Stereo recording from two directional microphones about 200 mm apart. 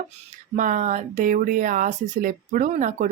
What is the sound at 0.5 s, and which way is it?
Speech, 40° right (ahead or behind).